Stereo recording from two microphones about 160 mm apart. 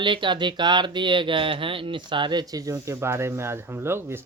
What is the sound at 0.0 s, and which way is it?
Speech, 30° right (ahead or behind).